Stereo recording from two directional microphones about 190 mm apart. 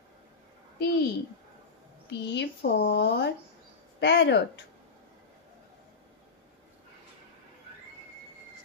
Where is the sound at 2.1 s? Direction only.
65° left (ahead or behind).